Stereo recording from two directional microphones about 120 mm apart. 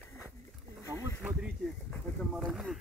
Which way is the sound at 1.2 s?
15° right (ahead or behind).